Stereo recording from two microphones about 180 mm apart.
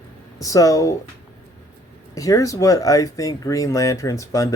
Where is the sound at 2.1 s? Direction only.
20° left (ahead or behind).